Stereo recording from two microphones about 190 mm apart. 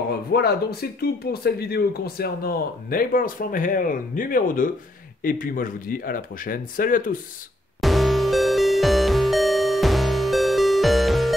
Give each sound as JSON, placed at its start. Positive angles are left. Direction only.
{"t": 0.3, "sound": "speech", "side_deg": 55}
{"t": 7.8, "sound": "music", "side_deg": 0}